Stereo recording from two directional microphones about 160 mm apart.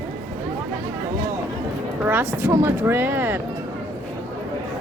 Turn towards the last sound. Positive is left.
turn(degrees=-10)  # may be behind; listen again after turning